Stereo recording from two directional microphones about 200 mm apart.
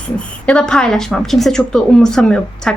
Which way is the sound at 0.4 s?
5° left (ahead or behind).